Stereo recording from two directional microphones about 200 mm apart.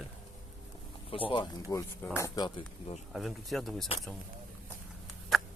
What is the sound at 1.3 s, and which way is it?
Speech, 20° left (ahead or behind).